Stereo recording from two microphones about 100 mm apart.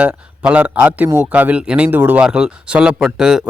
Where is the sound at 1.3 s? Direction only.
15° right (ahead or behind).